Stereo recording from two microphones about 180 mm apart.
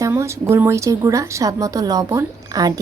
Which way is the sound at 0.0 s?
15° right (ahead or behind).